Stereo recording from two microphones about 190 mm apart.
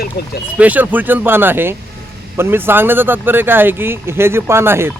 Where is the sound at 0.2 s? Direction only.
55° left (ahead or behind).